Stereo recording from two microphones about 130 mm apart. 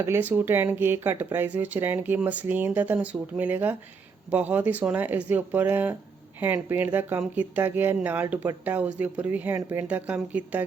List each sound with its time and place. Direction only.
0.0 s speech: 15° right (ahead or behind)
9.8 s speech: 10° right (ahead or behind)